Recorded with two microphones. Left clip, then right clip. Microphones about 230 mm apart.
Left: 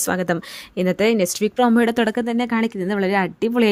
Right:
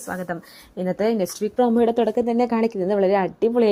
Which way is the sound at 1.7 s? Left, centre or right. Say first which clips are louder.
Even; left.